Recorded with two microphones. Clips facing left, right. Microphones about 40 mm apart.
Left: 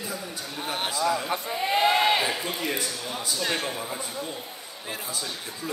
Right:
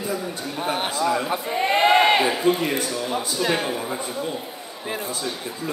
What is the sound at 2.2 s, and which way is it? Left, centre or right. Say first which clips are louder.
Speech: right 8 dB; centre.